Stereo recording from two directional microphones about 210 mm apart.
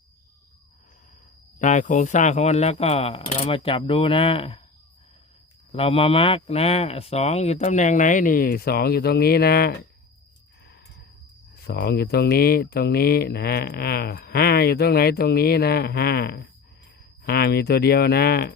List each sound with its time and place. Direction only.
1.5 s speech: 35° left (ahead or behind)
5.7 s speech: 25° left (ahead or behind); by 9.7 s 50° left (ahead or behind)
11.5 s speech: 50° left (ahead or behind)